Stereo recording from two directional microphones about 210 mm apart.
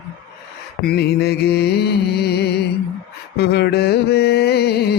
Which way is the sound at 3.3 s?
50° left (ahead or behind).